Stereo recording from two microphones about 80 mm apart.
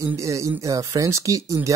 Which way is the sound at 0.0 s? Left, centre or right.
Right.